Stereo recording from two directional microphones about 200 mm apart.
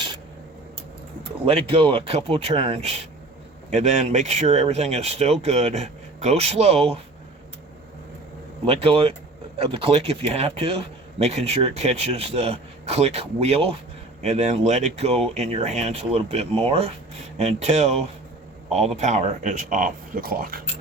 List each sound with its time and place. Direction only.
1.5 s speech: 30° right (ahead or behind)
8.6 s speech: 30° right (ahead or behind); by 20.6 s 45° right (ahead or behind)